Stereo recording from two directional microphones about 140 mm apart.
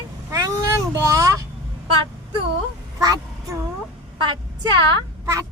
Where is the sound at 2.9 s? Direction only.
25° right (ahead or behind).